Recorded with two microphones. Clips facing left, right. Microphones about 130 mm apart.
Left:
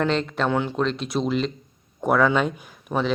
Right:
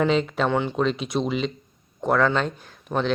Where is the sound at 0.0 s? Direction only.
5° right (ahead or behind).